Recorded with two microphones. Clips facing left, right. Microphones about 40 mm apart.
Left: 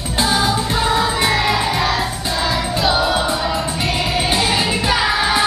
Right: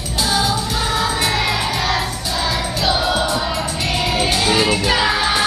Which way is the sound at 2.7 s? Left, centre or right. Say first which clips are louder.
Left 2 dB; centre.